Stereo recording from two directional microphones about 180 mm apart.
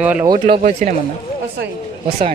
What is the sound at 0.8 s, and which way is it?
Speech, 40° right (ahead or behind).